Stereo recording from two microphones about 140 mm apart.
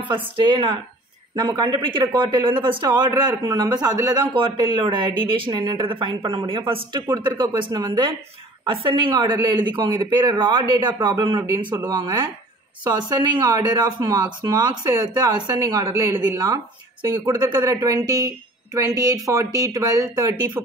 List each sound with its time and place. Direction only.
0.4 s speech: 35° right (ahead or behind)
11.7 s speech: 20° right (ahead or behind)
12.8 s speech: 30° right (ahead or behind)